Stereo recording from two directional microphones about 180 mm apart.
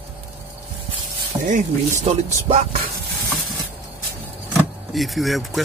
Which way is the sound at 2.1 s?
35° right (ahead or behind).